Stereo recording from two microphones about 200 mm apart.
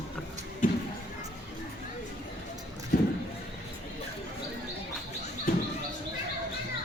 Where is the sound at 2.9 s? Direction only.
40° left (ahead or behind).